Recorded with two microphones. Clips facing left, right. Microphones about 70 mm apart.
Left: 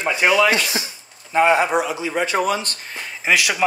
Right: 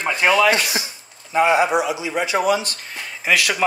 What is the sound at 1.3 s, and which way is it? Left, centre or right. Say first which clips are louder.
Speech: even; left.